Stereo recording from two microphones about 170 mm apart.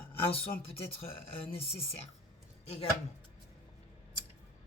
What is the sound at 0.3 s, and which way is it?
Speech, 35° left (ahead or behind).